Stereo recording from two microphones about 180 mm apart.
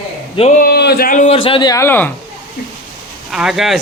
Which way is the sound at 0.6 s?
65° left (ahead or behind).